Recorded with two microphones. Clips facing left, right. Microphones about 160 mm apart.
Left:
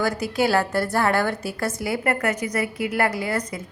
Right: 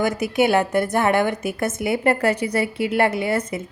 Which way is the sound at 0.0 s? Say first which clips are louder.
Right 3 dB; 20° right (ahead or behind).